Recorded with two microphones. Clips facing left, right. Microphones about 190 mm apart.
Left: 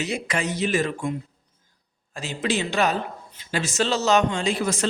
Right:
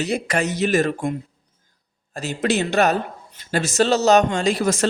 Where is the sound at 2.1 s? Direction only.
45° right (ahead or behind).